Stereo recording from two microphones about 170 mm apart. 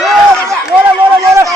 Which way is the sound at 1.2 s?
20° right (ahead or behind).